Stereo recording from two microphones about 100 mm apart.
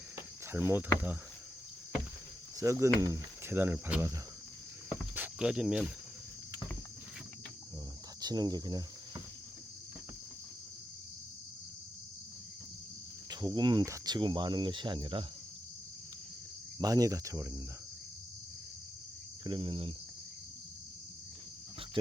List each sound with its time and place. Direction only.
0.2 s cricket: 25° right (ahead or behind)
2.6 s cricket: 30° right (ahead or behind)
3.0 s speech: 25° right (ahead or behind)
5.1 s speech: 15° right (ahead or behind)
8.2 s cricket: 45° right (ahead or behind)
13.3 s cricket: 40° right (ahead or behind)
13.8 s cricket: 30° right (ahead or behind)
14.1 s speech: 50° right (ahead or behind)
16.8 s cricket: 35° right (ahead or behind)
19.5 s speech: 50° right (ahead or behind)